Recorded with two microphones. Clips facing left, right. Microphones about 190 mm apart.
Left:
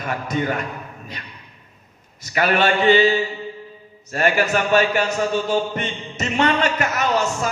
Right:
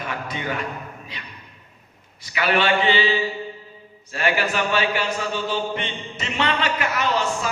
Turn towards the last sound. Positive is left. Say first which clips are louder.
# left 2 dB
turn(degrees=45)  # may be behind; listen again after turning